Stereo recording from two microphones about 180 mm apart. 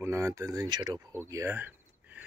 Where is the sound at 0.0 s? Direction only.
15° right (ahead or behind).